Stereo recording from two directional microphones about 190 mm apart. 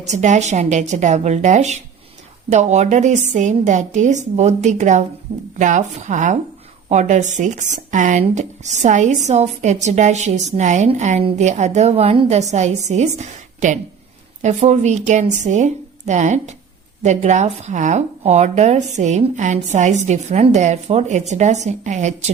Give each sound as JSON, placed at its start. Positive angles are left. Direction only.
{"t": 0.0, "sound": "speech", "side_deg": -40}